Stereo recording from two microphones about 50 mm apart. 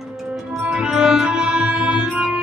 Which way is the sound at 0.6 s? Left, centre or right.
Centre.